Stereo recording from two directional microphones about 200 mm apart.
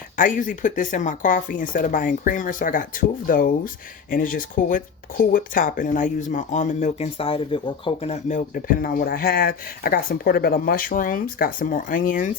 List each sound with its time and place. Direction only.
0.2 s speech: 40° left (ahead or behind)